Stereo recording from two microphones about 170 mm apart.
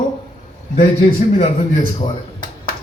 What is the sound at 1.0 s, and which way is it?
Speech, 40° left (ahead or behind).